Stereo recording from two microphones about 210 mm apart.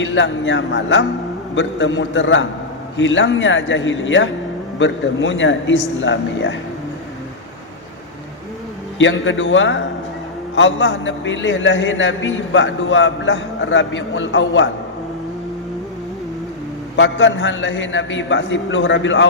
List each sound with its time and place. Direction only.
0.0 s a man's voice: 65° left (ahead or behind)
9.0 s a man's voice: 65° left (ahead or behind)
17.0 s a man's voice: 60° left (ahead or behind)